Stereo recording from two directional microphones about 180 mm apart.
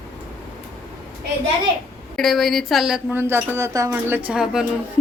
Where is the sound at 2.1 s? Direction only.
Centre (ahead or behind).